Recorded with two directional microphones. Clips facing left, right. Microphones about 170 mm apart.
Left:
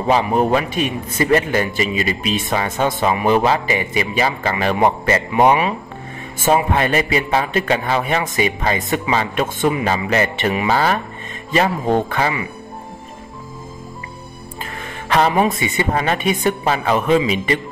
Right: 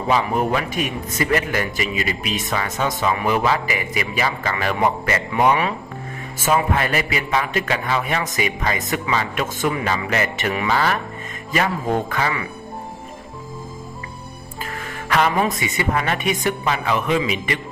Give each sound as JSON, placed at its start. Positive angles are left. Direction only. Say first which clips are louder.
{"t": 0.1, "sound": "a man's voice", "louder": "left 4 dB", "side_deg": 30}
{"t": 10.7, "sound": "a man's voice", "louder": "left 3 dB", "side_deg": 35}
{"t": 14.6, "sound": "a woman's voice", "louder": "even", "side_deg": 25}